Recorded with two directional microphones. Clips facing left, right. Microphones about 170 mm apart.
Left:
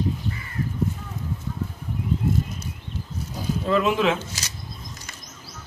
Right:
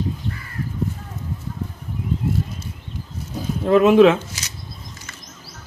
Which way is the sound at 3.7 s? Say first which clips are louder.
Right 9 dB; 60° right (ahead or behind).